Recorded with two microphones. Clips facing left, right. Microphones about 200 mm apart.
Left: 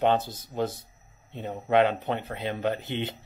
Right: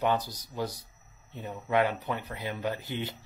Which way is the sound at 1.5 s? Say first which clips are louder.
Left 5 dB; 30° left (ahead or behind).